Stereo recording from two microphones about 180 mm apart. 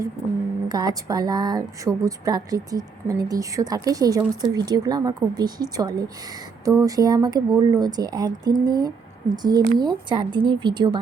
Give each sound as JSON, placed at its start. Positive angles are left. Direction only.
{"t": 0.7, "sound": "speech", "side_deg": -20}